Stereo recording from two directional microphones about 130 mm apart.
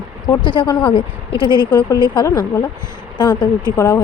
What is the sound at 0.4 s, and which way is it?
Speech, 40° left (ahead or behind).